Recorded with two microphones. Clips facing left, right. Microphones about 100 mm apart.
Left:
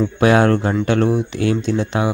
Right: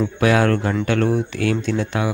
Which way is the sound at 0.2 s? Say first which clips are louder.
Left 3 dB; 30° left (ahead or behind).